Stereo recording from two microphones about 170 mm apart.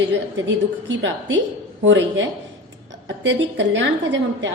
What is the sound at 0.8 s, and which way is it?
A woman's voice, 90° right.